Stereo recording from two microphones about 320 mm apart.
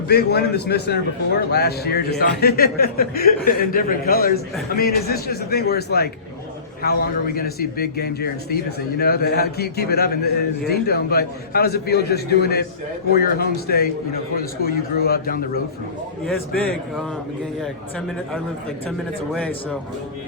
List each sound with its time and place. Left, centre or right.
0.1 s a man's voice: left
18.9 s speech: centre